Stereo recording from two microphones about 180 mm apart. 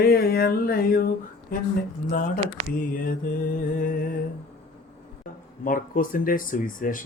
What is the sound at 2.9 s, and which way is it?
Speech, 50° left (ahead or behind).